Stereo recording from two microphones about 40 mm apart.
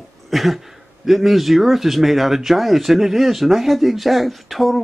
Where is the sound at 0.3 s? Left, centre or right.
Centre.